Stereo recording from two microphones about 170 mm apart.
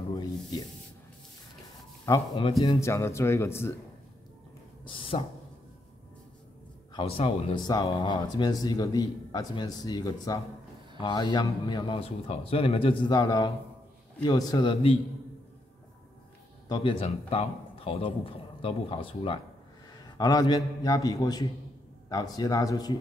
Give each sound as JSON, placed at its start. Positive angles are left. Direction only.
{"t": 2.0, "sound": "a man's voice", "side_deg": 25}
{"t": 4.8, "sound": "speech", "side_deg": 30}
{"t": 6.9, "sound": "a man's voice", "side_deg": 30}
{"t": 16.6, "sound": "a man's voice", "side_deg": 25}